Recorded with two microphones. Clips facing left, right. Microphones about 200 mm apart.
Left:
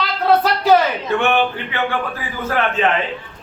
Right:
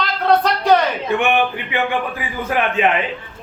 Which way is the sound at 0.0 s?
5° left (ahead or behind).